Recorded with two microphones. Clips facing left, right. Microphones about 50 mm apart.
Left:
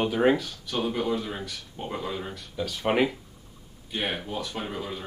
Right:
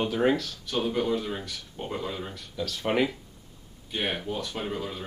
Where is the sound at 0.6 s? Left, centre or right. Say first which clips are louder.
Right 1 dB; centre.